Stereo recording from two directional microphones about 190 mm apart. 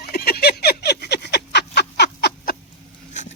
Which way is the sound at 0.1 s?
55° left (ahead or behind).